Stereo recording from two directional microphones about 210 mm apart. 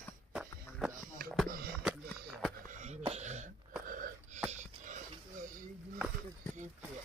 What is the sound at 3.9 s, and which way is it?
Wheeze, 40° right (ahead or behind).